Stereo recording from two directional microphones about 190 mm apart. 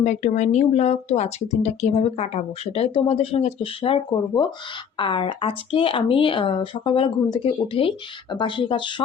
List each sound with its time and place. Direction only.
0.0 s speech: 40° left (ahead or behind)